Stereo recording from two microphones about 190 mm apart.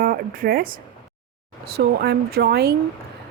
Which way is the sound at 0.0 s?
50° right (ahead or behind).